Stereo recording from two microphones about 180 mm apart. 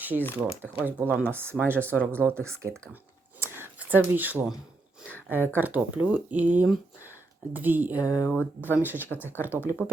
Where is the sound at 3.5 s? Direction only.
10° right (ahead or behind).